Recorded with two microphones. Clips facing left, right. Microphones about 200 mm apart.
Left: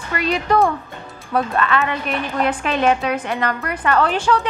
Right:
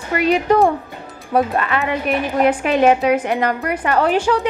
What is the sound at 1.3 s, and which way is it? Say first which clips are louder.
A woman's voice: right 2 dB; 15° right (ahead or behind).